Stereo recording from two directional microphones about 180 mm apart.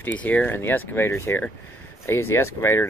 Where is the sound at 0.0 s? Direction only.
10° left (ahead or behind).